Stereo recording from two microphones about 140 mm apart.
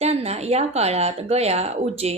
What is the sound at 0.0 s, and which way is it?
Speech, 50° right (ahead or behind).